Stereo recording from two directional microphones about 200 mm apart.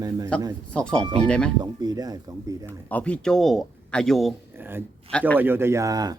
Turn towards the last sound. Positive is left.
turn(degrees=-15)  # may be behind; listen again after turning